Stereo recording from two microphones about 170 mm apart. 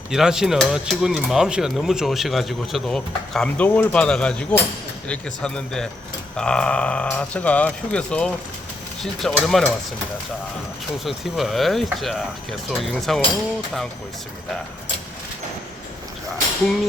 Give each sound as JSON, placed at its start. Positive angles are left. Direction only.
{"t": 0.1, "sound": "speech", "side_deg": -5}
{"t": 11.0, "sound": "speech", "side_deg": 0}